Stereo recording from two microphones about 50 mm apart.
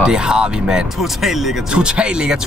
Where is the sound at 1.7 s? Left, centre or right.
Centre.